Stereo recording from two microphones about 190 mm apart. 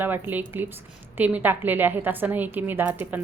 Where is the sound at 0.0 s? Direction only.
10° right (ahead or behind).